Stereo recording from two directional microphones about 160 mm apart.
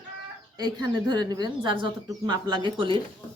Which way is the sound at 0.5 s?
25° right (ahead or behind).